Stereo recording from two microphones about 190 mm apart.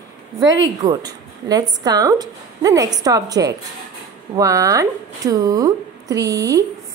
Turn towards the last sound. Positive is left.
turn(degrees=-20)  # may be behind; listen again after turning